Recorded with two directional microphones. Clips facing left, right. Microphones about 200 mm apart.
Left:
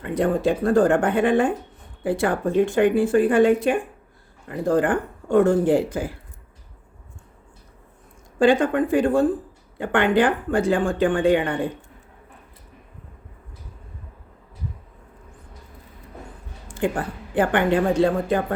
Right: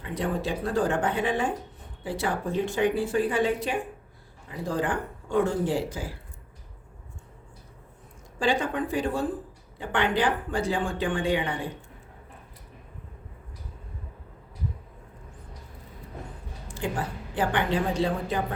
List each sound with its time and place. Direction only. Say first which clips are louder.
0.0 s speech: left 8 dB; 50° left (ahead or behind)
8.4 s speech: left 9 dB; 50° left (ahead or behind)
16.7 s speech: left 6 dB; 55° left (ahead or behind)